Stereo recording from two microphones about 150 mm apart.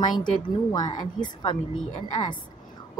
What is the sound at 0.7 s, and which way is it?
Speech, 25° left (ahead or behind).